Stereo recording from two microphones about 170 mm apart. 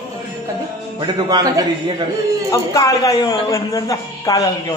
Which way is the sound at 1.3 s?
20° right (ahead or behind).